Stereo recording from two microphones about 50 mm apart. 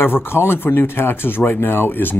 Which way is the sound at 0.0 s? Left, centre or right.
Left.